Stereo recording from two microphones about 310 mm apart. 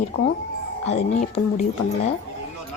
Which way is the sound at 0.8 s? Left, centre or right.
Left.